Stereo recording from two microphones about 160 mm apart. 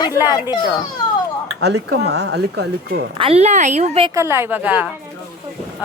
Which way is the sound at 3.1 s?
35° right (ahead or behind).